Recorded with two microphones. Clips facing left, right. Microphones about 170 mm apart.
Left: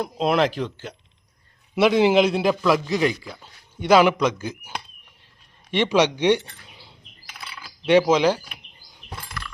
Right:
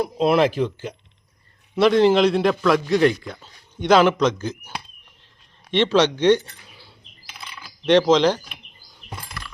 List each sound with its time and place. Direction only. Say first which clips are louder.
0.0 s a man's voice: right 3 dB; 5° right (ahead or behind)
1.7 s a man's voice: right 1 dB; 5° left (ahead or behind)
5.7 s speech: right 2 dB; 10° left (ahead or behind)
6.7 s bird: even; 20° left (ahead or behind)
7.4 s a sound: right 2 dB; 10° left (ahead or behind)